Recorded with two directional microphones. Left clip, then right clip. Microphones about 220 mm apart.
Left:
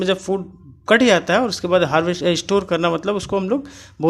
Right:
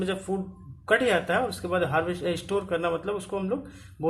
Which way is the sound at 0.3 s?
50° left (ahead or behind).